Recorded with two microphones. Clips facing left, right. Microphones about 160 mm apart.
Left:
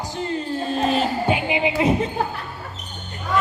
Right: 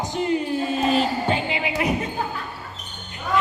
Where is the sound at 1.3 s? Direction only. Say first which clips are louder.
Left 3 dB; 15° left (ahead or behind).